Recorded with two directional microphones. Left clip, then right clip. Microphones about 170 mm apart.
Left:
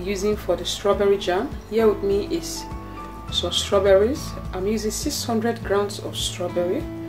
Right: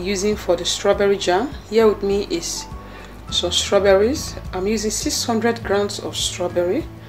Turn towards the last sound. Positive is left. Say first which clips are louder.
# right 4 dB
turn(degrees=-35)  # may be behind; listen again after turning